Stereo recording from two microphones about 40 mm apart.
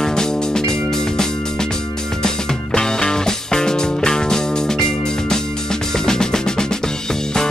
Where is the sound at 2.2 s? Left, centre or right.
Centre.